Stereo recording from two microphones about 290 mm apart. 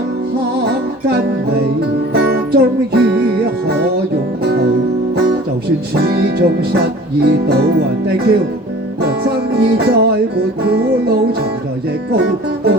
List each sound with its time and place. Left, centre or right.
2.1 s music: right
5.9 s music: right